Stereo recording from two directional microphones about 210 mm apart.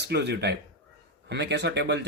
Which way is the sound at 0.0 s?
50° right (ahead or behind).